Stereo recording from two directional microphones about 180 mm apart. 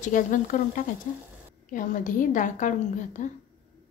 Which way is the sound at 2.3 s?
45° left (ahead or behind).